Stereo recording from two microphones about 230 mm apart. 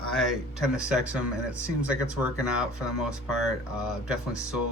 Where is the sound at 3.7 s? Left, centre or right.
Centre.